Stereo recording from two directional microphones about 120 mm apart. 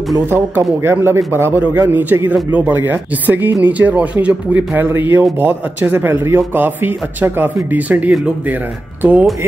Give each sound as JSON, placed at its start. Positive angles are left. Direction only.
{"t": 0.3, "sound": "a man's voice", "side_deg": -20}